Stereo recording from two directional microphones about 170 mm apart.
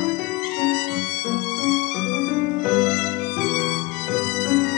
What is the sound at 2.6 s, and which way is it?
Music, centre (ahead or behind).